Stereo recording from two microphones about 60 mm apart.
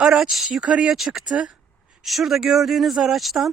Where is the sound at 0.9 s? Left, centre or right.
Centre.